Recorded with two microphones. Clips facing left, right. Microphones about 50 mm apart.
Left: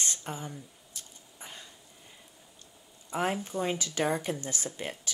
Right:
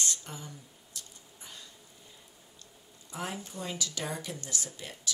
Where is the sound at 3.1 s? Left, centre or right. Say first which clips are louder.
Left 8 dB; left.